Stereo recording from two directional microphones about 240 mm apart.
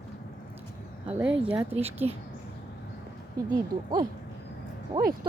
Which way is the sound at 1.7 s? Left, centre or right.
Right.